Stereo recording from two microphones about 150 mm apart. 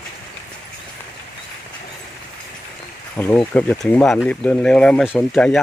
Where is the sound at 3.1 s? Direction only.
10° left (ahead or behind).